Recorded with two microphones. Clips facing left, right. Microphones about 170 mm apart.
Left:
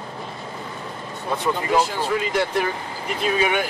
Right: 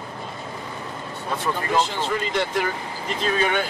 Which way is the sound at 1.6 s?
10° left (ahead or behind).